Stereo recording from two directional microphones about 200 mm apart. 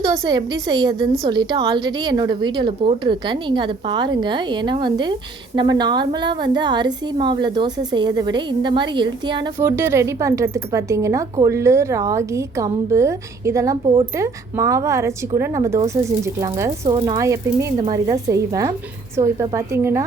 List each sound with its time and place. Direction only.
0.0 s a woman's voice: 20° right (ahead or behind)
14.2 s speech: 15° right (ahead or behind)